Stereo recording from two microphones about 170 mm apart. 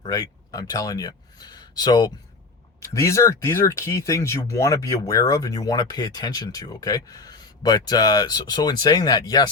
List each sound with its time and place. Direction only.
0.0 s speech: 20° left (ahead or behind)